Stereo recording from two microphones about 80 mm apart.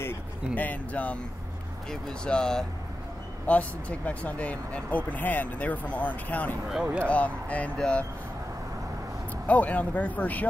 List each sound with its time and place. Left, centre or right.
0.0 s speech: left
6.7 s speech: centre
7.1 s speech: centre
9.5 s speech: centre